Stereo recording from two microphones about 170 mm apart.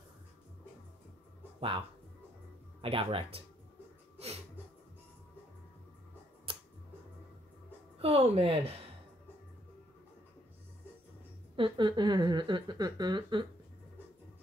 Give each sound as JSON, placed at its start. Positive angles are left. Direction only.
{"t": 1.6, "sound": "a woman's voice", "side_deg": -30}
{"t": 6.5, "sound": "a sound", "side_deg": -30}
{"t": 8.0, "sound": "a woman's voice", "side_deg": -35}
{"t": 11.5, "sound": "speech", "side_deg": -30}